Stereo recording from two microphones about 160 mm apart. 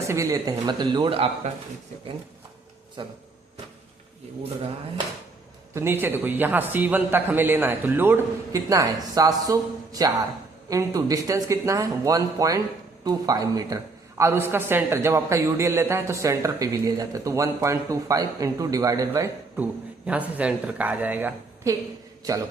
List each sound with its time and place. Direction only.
0.0 s a man's voice: 20° right (ahead or behind)
3.0 s a man's voice: 30° right (ahead or behind)
5.7 s a man's voice: 15° right (ahead or behind)